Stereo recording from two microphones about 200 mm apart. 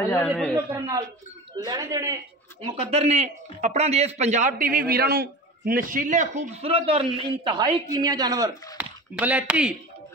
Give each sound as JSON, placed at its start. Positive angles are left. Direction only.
{"t": 0.0, "sound": "speech", "side_deg": 10}
{"t": 0.7, "sound": "speech", "side_deg": -15}
{"t": 2.6, "sound": "speech", "side_deg": -30}
{"t": 8.7, "sound": "speech", "side_deg": -5}